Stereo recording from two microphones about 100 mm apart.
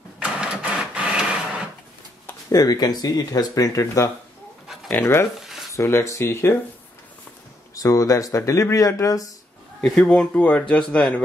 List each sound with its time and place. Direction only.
0.2 s printer: 10° right (ahead or behind)
2.5 s speech: 40° left (ahead or behind); by 5.3 s 25° left (ahead or behind)
5.4 s a sound: 5° right (ahead or behind)
5.7 s speech: 25° left (ahead or behind)
7.7 s speech: 35° left (ahead or behind)
9.8 s speech: 10° left (ahead or behind)